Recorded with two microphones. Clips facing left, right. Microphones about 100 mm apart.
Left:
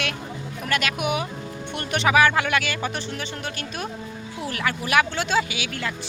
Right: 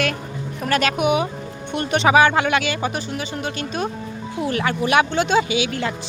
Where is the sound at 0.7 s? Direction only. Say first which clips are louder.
Right 5 dB; 35° right (ahead or behind).